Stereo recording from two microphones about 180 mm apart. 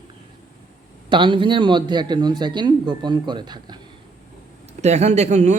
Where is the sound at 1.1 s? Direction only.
25° right (ahead or behind).